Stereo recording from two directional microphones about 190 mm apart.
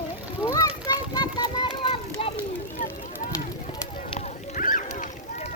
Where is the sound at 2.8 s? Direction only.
45° left (ahead or behind).